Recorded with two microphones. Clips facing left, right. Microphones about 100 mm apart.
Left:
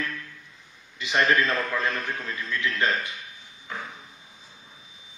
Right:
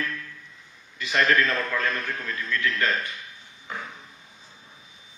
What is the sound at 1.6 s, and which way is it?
A man's voice, 20° left (ahead or behind).